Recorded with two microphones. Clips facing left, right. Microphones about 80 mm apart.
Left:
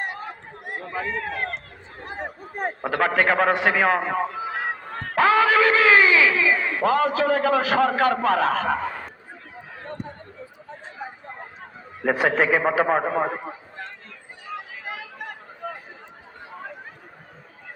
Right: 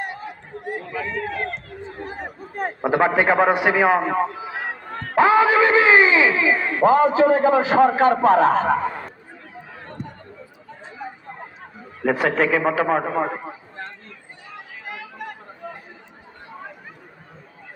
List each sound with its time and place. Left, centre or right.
0.9 s speech: left
2.8 s a man's voice: centre
5.1 s a man's voice: right
12.0 s a man's voice: centre